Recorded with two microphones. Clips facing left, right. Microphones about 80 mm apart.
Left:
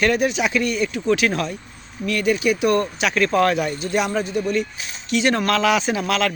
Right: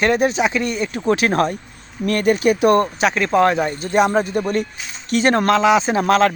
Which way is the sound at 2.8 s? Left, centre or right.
Right.